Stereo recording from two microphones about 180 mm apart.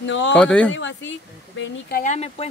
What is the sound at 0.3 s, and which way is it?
Speech, 5° left (ahead or behind).